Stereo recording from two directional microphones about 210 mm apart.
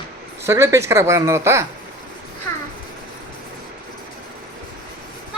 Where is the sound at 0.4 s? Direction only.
15° right (ahead or behind).